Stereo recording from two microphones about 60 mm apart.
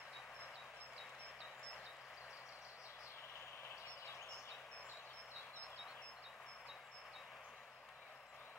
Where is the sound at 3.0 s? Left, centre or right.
Left.